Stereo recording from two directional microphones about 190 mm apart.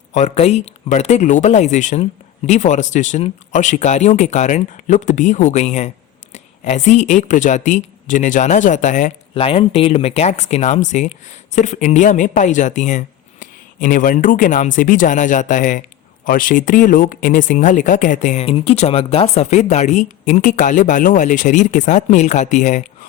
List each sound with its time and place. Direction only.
0.1 s speech: 40° left (ahead or behind)